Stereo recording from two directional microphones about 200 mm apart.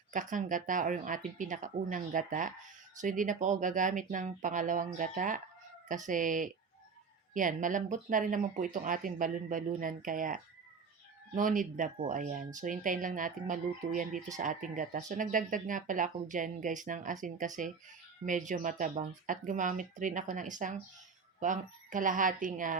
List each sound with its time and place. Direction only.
0.1 s speech: 40° right (ahead or behind)